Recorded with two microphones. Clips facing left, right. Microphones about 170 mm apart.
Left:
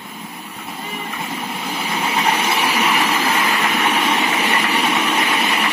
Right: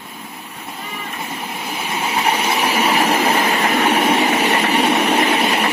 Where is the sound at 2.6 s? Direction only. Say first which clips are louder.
Right 2 dB; 35° right (ahead or behind).